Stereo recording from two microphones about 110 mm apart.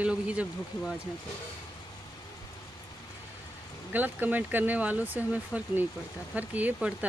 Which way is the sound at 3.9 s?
15° right (ahead or behind).